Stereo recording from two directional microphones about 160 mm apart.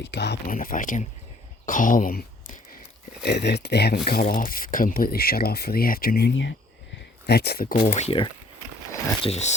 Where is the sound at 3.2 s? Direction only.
90° left; by 7.9 s 65° left (ahead or behind).